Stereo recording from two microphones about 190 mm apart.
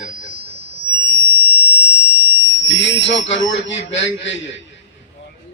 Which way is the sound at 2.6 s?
70° left (ahead or behind).